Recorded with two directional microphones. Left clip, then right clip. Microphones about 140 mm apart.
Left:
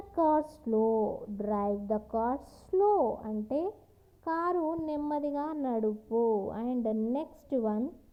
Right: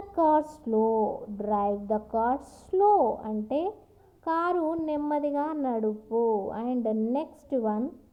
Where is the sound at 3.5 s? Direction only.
30° left (ahead or behind).